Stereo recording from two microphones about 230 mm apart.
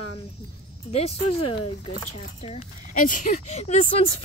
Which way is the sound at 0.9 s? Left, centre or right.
Left.